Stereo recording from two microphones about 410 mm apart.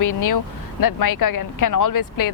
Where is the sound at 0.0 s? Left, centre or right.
Left.